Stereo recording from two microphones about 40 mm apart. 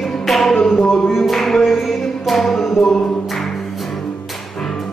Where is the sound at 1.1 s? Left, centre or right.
Centre.